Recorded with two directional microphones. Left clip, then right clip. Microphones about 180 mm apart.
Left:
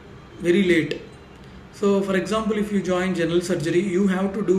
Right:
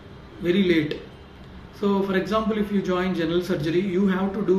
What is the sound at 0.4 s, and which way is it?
A man's voice, 20° left (ahead or behind).